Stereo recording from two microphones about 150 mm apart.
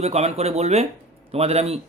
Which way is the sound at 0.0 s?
45° right (ahead or behind).